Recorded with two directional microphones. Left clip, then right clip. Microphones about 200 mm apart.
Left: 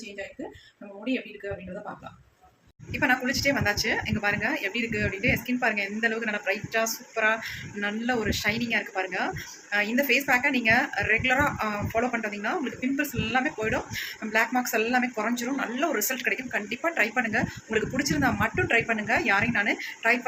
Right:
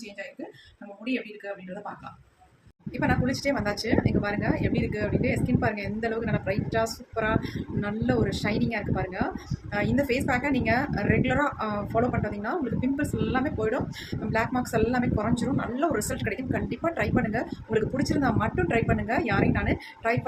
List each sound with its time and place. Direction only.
2.9 s a woman's voice: 5° right (ahead or behind)